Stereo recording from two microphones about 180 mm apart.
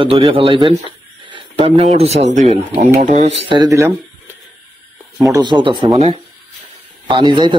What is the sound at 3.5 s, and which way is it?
Speech, 20° right (ahead or behind).